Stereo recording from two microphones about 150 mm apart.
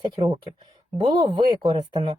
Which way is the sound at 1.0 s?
30° right (ahead or behind).